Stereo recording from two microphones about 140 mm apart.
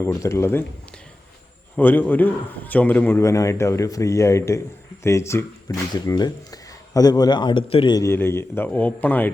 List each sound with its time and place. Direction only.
0.0 s speech: 20° left (ahead or behind)
1.7 s speech: 15° left (ahead or behind); by 7.9 s 40° left (ahead or behind)
7.9 s a man's voice: 20° left (ahead or behind)